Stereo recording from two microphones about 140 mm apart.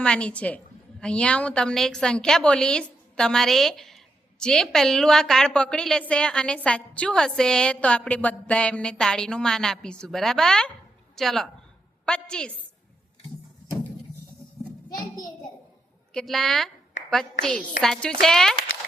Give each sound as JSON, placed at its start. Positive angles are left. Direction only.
{"t": 0.0, "sound": "a woman's voice", "side_deg": 5}
{"t": 14.9, "sound": "a child's voice", "side_deg": 30}
{"t": 16.1, "sound": "a woman's voice", "side_deg": 0}